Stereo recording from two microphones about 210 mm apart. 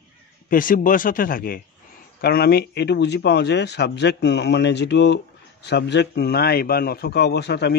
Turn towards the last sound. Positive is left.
turn(degrees=55)  # may be behind; listen again after turning